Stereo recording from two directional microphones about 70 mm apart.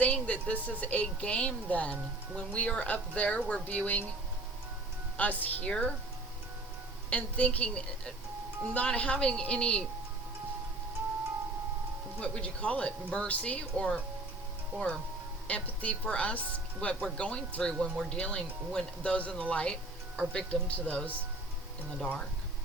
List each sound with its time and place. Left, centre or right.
0.0 s speech: centre
5.1 s speech: left
7.1 s speech: centre
12.2 s speech: centre
15.4 s speech: centre